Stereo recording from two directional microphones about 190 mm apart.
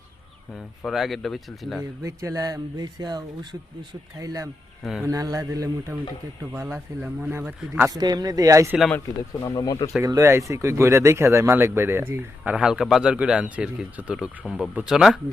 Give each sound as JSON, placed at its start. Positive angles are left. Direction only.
{"t": 0.5, "sound": "speech", "side_deg": 0}
{"t": 2.0, "sound": "speech", "side_deg": -15}
{"t": 4.8, "sound": "speech", "side_deg": 0}
{"t": 5.0, "sound": "speech", "side_deg": -20}
{"t": 7.9, "sound": "speech", "side_deg": -20}
{"t": 9.4, "sound": "speech", "side_deg": 15}
{"t": 10.0, "sound": "speech", "side_deg": -15}